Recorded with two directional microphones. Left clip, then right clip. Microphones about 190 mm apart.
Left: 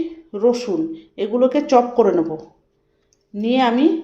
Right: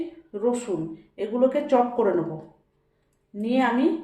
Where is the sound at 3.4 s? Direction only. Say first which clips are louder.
Left 6 dB; 50° left (ahead or behind).